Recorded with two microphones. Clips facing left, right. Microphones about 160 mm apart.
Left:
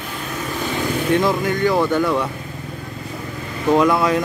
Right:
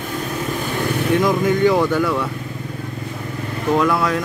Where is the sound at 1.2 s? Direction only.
15° right (ahead or behind).